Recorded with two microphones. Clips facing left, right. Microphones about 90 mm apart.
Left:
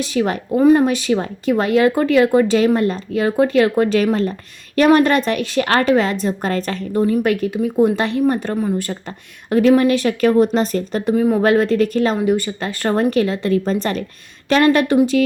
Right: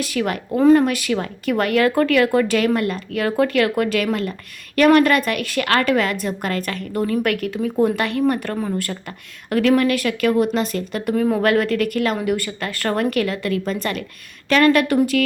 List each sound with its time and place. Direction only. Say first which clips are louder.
0.0 s speech: left 3 dB; 25° left (ahead or behind)
0.5 s speech: left 1 dB; 15° left (ahead or behind); by 6.8 s 30° left (ahead or behind)
6.9 s a woman's voice: left 4 dB; 15° left (ahead or behind); by 11.0 s 35° left (ahead or behind)
11.1 s a woman's voice: left 3 dB; 10° left (ahead or behind)
11.4 s speech: left 3 dB; 25° left (ahead or behind)